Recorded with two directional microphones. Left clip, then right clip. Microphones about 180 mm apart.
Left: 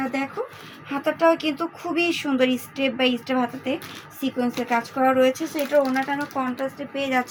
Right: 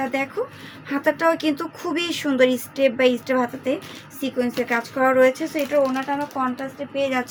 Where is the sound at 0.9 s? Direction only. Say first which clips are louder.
Even; 50° right (ahead or behind).